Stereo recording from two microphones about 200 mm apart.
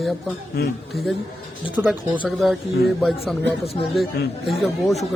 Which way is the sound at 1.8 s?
10° right (ahead or behind).